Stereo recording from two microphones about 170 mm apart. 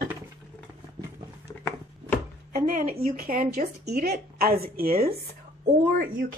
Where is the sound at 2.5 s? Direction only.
55° right (ahead or behind).